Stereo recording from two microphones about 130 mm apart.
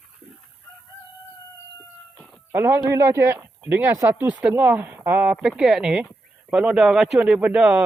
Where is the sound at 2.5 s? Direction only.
20° right (ahead or behind).